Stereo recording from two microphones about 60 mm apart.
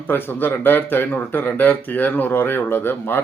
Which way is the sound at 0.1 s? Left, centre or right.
Left.